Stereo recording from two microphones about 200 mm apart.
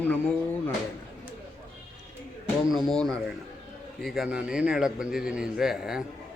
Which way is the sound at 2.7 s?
Centre (ahead or behind).